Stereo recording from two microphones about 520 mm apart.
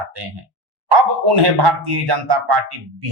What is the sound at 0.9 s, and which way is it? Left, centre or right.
Speech, right.